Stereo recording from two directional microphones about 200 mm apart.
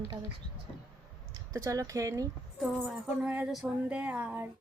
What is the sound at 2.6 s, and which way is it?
A woman's voice, centre (ahead or behind).